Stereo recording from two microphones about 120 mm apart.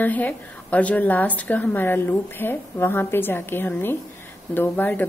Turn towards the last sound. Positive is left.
turn(degrees=15)  # may be behind; listen again after turning